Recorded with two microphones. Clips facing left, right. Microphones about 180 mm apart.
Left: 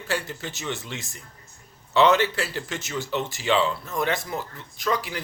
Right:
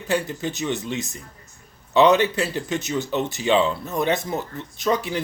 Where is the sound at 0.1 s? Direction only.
20° right (ahead or behind).